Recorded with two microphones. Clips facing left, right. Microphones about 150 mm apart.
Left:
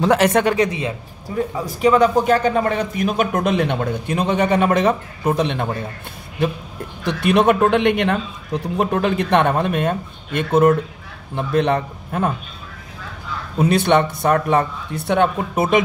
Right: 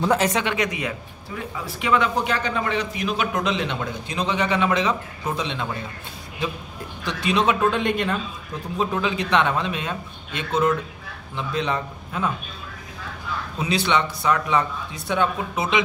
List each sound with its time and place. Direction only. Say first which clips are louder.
0.0 s speech: left 5 dB; 70° left (ahead or behind)
0.4 s a man's voice: left 7 dB; 35° left (ahead or behind); by 5.7 s 55° left (ahead or behind)
7.1 s speech: left 6 dB; 60° left (ahead or behind)
13.6 s a man's voice: left 7 dB; 55° left (ahead or behind)